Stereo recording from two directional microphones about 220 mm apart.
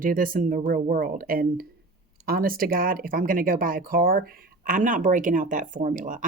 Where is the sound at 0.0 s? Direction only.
40° right (ahead or behind).